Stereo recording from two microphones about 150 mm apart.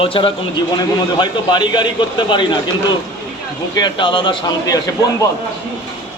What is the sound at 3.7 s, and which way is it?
A man's voice, 30° left (ahead or behind).